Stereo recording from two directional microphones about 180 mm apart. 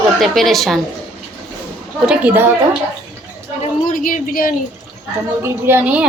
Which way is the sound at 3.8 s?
50° left (ahead or behind).